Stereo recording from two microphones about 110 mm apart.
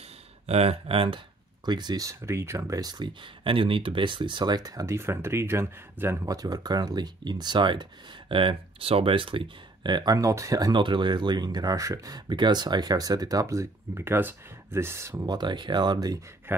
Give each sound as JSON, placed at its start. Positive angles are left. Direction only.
{"t": 0.5, "sound": "speech", "side_deg": -65}
{"t": 1.7, "sound": "speech", "side_deg": -40}
{"t": 6.2, "sound": "speech", "side_deg": -35}
{"t": 15.2, "sound": "speech", "side_deg": -40}
{"t": 16.5, "sound": "speech", "side_deg": -20}